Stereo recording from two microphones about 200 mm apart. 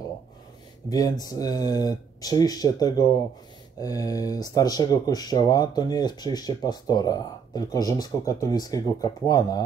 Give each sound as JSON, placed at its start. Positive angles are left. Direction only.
{"t": 0.8, "sound": "speech", "side_deg": 20}